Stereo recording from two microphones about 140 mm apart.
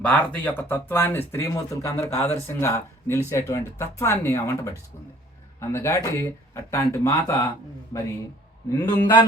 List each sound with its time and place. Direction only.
0.0 s speech: 10° left (ahead or behind)
8.7 s speech: 25° left (ahead or behind)